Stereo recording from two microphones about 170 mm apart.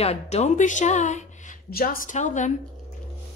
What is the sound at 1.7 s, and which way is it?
Speech, 60° left (ahead or behind).